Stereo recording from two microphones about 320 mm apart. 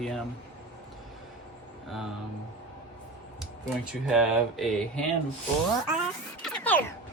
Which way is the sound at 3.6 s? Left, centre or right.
Centre.